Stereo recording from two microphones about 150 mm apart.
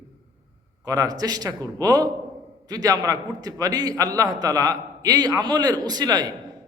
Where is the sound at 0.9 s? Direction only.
25° right (ahead or behind).